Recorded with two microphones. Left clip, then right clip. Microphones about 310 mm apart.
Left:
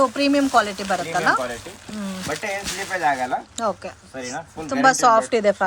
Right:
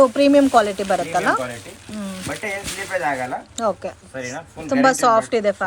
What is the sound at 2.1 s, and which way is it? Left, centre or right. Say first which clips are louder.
Speech: left 1 dB; left.